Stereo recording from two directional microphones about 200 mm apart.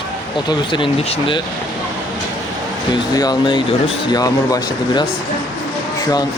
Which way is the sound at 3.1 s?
20° left (ahead or behind).